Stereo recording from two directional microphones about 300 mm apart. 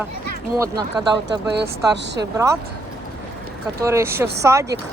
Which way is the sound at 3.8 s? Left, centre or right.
Centre.